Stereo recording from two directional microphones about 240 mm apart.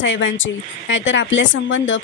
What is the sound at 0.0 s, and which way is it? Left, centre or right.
A woman's voice, left.